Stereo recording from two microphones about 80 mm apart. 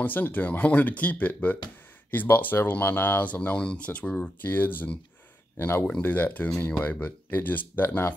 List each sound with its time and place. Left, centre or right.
0.0 s speech: left
4.4 s speech: left
5.9 s speech: centre